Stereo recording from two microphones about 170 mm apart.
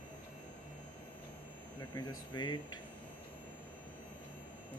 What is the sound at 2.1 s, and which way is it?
Speech, 25° left (ahead or behind).